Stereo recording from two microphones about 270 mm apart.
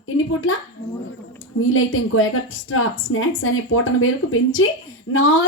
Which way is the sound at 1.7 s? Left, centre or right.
Left.